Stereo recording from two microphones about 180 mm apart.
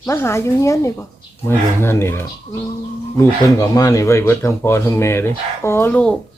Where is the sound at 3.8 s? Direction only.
15° left (ahead or behind).